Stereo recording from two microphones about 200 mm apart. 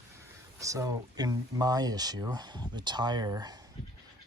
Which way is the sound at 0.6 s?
15° right (ahead or behind).